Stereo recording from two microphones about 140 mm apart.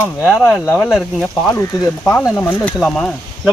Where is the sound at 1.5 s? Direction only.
20° left (ahead or behind).